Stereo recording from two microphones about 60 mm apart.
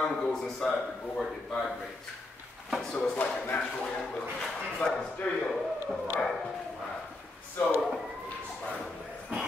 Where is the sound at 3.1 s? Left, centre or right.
Left.